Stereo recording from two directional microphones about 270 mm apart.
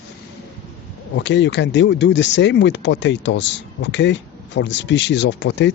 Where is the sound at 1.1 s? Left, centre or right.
Left.